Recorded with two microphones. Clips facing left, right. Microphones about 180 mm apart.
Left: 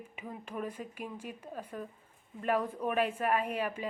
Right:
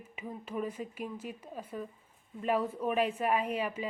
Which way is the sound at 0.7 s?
10° left (ahead or behind).